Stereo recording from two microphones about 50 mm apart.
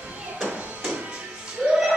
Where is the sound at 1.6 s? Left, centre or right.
Right.